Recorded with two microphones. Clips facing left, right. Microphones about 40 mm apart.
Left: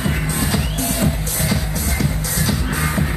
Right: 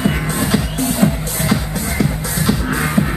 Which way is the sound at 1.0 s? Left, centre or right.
Right.